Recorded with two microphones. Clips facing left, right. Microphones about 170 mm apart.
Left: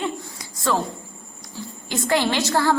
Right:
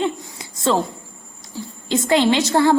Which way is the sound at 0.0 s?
25° right (ahead or behind).